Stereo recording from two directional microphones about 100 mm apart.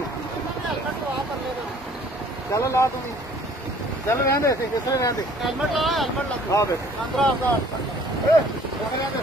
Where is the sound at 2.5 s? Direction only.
30° left (ahead or behind).